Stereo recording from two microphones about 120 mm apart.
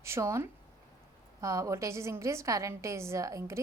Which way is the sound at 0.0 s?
25° right (ahead or behind).